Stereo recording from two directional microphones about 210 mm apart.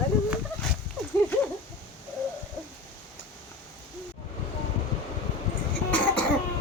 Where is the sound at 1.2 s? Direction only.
10° left (ahead or behind).